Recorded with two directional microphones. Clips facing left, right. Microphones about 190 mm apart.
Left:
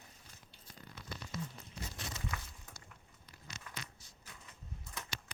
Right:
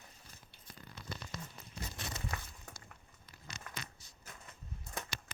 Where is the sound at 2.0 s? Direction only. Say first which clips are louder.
Right 2 dB; 60° right (ahead or behind).